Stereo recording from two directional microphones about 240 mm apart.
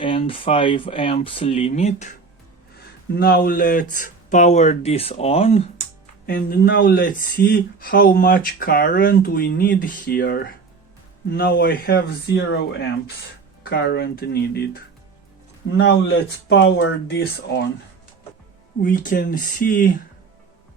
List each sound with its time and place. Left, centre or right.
0.0 s speech: left
3.2 s speech: left
6.2 s speech: left
15.8 s speech: left
18.8 s speech: left